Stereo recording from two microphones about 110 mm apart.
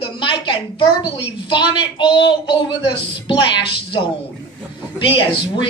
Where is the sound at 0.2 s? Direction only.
50° left (ahead or behind).